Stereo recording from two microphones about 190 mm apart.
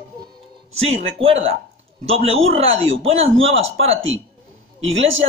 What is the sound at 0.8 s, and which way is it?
Speech, 30° right (ahead or behind).